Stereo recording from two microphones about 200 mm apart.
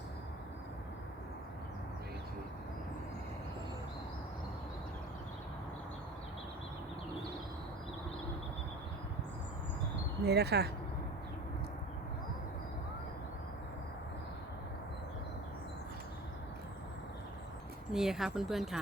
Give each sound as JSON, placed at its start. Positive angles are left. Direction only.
{"t": 10.2, "sound": "speech", "side_deg": -55}
{"t": 17.9, "sound": "speech", "side_deg": 0}